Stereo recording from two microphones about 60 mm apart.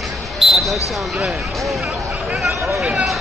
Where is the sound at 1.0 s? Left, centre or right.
Centre.